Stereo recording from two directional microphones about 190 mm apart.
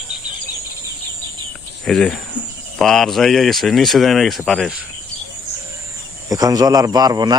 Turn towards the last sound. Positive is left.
turn(degrees=-20)  # may be behind; listen again after turning